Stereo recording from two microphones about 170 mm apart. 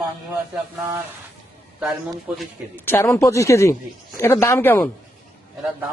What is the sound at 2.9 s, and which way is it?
A man's voice, 15° left (ahead or behind).